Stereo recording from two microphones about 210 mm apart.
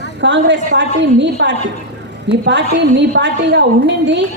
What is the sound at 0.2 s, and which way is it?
A woman's voice, 60° right (ahead or behind).